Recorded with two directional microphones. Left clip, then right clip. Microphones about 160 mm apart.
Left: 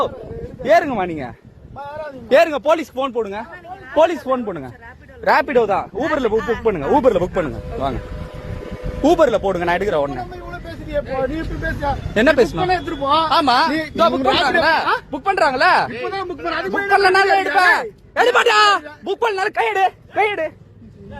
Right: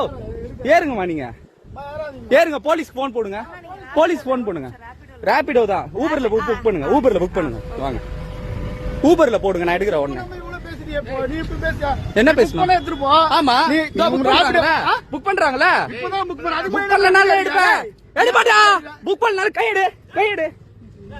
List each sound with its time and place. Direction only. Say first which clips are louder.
0.6 s a man's voice: left 1 dB; 40° right (ahead or behind)
1.8 s a sound: even; centre (ahead or behind)
2.3 s speech: left 1 dB; 25° right (ahead or behind)
3.9 s a man's voice: left 1 dB; 45° right (ahead or behind)
5.2 s speech: left 1 dB; 25° right (ahead or behind)
7.8 s a man's voice: left 3 dB; 20° right (ahead or behind)
9.0 s a man's voice: even; 40° right (ahead or behind)
10.3 s vehicle: even; 15° left (ahead or behind)
11.3 s a man's voice: right 1 dB; 25° right (ahead or behind)
14.5 s a man's voice: even; 20° right (ahead or behind)
17.2 s a man's voice: right 1 dB; 30° right (ahead or behind)
19.0 s a man's voice: right 2 dB; 40° right (ahead or behind)